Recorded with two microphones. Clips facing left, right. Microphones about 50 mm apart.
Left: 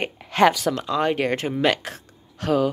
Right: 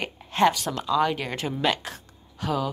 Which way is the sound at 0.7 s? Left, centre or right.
Left.